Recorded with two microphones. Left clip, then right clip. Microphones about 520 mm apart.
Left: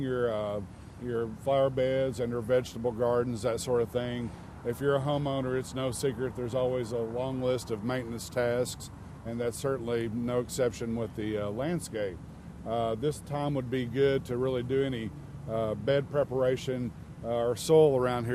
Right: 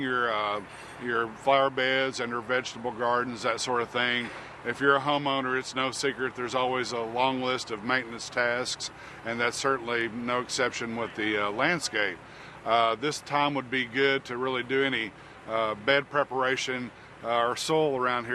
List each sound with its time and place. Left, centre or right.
0.0 s speech: left